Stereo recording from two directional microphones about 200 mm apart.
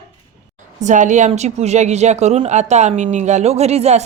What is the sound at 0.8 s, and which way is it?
A woman's voice, 35° right (ahead or behind).